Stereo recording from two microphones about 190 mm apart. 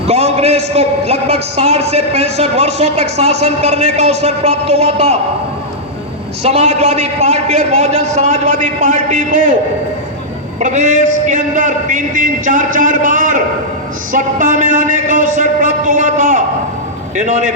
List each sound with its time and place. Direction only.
0.1 s a man's voice: 35° right (ahead or behind)
6.4 s a man's voice: 35° right (ahead or behind)
10.6 s a man's voice: 40° right (ahead or behind)